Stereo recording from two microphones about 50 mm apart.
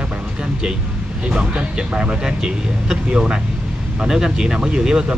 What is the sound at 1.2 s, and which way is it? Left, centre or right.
Speech, centre.